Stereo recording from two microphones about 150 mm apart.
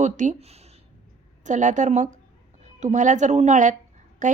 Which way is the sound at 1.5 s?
55° right (ahead or behind).